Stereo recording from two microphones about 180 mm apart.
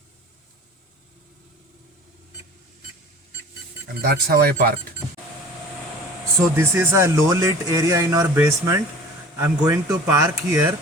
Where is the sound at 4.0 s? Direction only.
60° right (ahead or behind).